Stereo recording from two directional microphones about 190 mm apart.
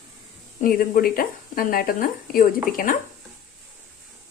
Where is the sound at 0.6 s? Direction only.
50° left (ahead or behind).